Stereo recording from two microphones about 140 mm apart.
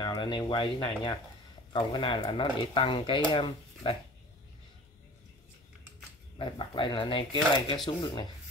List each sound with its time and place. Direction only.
0.0 s speech: 35° left (ahead or behind)
6.3 s speech: 35° left (ahead or behind)